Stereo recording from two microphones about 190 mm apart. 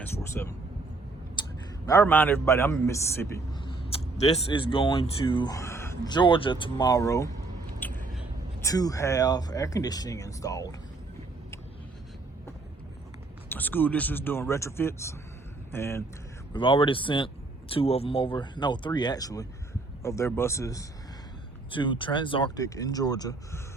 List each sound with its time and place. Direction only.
0.4 s speech: 10° left (ahead or behind)
1.4 s a sound: 25° left (ahead or behind)
1.9 s speech: 10° left (ahead or behind)
3.8 s speech: 30° left (ahead or behind); by 7.3 s 15° left (ahead or behind)
7.8 s a sound: 10° left (ahead or behind)
8.6 s speech: 20° left (ahead or behind)
13.5 s speech: 10° left (ahead or behind)
16.5 s speech: 25° left (ahead or behind)